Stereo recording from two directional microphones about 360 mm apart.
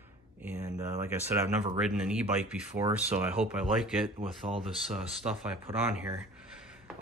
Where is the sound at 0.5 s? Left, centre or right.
Centre.